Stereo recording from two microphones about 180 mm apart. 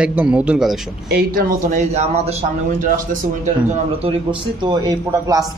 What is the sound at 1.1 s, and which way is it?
Speech, 50° right (ahead or behind).